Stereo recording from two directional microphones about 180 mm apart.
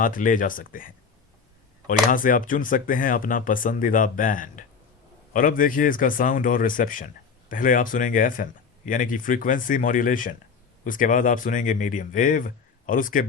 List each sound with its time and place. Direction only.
0.0 s speech: 50° left (ahead or behind)